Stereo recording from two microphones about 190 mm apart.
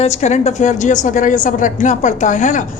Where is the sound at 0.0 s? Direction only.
35° left (ahead or behind).